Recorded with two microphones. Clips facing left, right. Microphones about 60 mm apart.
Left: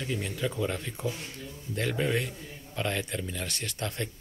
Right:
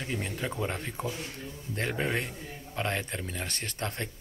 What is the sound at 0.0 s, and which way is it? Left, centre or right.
A man's voice, right.